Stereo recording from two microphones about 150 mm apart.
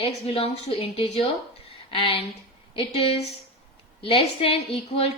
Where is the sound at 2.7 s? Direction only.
40° left (ahead or behind).